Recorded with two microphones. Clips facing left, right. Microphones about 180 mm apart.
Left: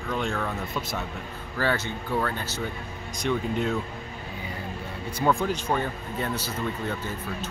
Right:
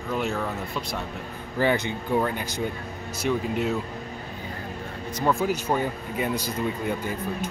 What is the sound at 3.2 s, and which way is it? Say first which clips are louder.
Speech: right 1 dB; 5° right (ahead or behind).